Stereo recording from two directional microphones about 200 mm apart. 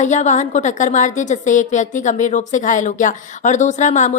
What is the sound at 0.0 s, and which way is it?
A woman's voice, 35° left (ahead or behind).